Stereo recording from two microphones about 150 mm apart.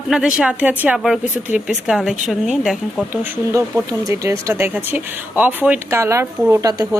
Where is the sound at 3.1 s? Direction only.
15° right (ahead or behind).